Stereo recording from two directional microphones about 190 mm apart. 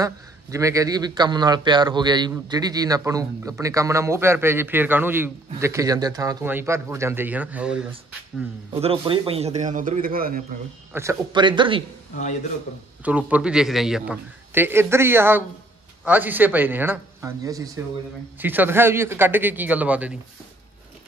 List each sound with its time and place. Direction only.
0.0 s a man's voice: 15° right (ahead or behind)
8.7 s a man's voice: 30° right (ahead or behind); by 10.4 s 50° right (ahead or behind)
10.9 s speech: 15° right (ahead or behind)
13.0 s a man's voice: 5° right (ahead or behind)